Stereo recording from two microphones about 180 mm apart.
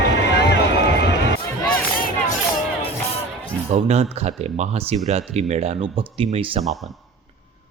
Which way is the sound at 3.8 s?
35° right (ahead or behind).